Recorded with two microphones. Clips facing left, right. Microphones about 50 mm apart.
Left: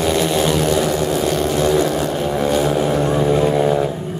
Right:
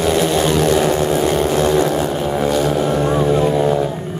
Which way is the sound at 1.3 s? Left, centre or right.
Centre.